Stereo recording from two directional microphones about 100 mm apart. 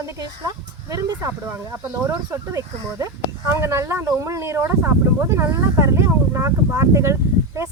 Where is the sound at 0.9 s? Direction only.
35° right (ahead or behind).